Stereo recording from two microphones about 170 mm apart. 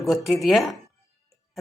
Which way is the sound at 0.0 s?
Centre (ahead or behind).